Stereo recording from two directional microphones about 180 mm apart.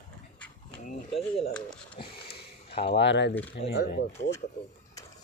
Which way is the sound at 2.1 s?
60° left (ahead or behind).